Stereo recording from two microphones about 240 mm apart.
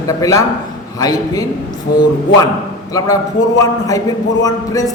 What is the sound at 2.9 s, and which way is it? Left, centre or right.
A man's voice, centre.